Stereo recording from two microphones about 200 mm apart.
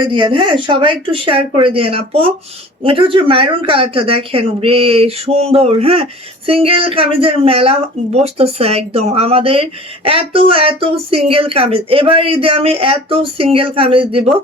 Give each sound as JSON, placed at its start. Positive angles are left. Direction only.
{"t": 0.0, "sound": "speech", "side_deg": -25}